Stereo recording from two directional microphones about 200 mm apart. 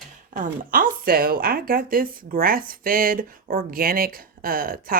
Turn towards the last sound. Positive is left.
turn(degrees=-45)  # may be behind; listen again after turning